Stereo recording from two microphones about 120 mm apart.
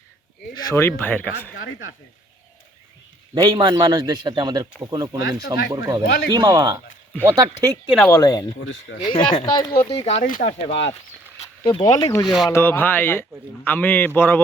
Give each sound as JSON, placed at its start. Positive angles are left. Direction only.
{"t": 0.5, "sound": "speech", "side_deg": 30}
{"t": 0.8, "sound": "speech", "side_deg": 20}
{"t": 3.3, "sound": "a man's voice", "side_deg": -30}
{"t": 8.1, "sound": "speech", "side_deg": 30}
{"t": 9.0, "sound": "speech", "side_deg": 40}
{"t": 9.9, "sound": "speech", "side_deg": 60}
{"t": 11.3, "sound": "a sound", "side_deg": 50}
{"t": 11.8, "sound": "speech", "side_deg": 30}
{"t": 12.2, "sound": "speech", "side_deg": 0}
{"t": 12.5, "sound": "speech", "side_deg": 20}